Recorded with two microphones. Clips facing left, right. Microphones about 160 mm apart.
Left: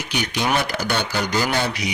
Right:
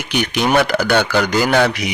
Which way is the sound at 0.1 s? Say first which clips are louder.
Right 6 dB; 65° right (ahead or behind).